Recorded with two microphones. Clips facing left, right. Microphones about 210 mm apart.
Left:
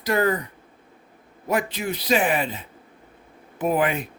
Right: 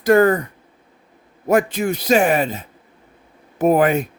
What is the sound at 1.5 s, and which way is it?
Speech, 45° right (ahead or behind).